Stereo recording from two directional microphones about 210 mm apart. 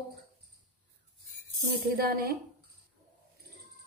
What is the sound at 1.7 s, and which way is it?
Speech, 45° right (ahead or behind).